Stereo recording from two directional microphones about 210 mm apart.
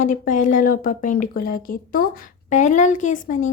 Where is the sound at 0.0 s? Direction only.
40° left (ahead or behind).